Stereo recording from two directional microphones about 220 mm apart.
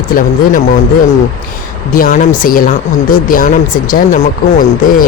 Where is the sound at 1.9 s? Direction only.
40° left (ahead or behind).